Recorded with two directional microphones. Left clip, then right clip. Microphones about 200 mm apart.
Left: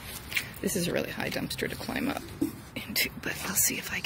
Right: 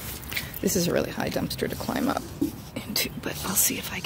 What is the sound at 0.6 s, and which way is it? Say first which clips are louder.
Speech: right 9 dB; centre (ahead or behind).